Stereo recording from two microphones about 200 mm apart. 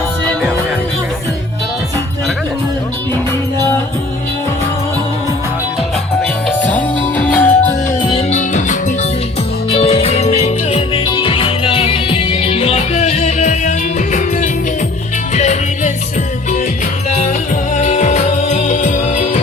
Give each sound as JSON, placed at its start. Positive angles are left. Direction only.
{"t": 6.6, "sound": "music", "side_deg": 5}
{"t": 8.0, "sound": "music", "side_deg": 30}
{"t": 17.1, "sound": "music", "side_deg": 35}